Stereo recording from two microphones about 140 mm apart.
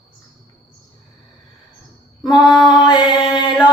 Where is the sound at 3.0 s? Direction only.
5° right (ahead or behind).